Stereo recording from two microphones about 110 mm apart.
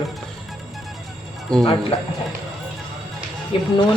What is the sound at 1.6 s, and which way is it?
Speech, 60° left (ahead or behind).